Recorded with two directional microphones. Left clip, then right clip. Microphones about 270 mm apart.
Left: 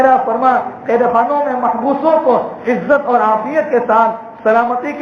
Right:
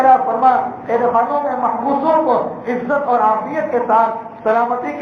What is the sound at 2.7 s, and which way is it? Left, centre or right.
A man's voice, left.